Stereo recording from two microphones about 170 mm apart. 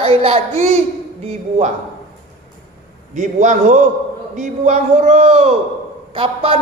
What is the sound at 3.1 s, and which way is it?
A man's voice, 45° right (ahead or behind).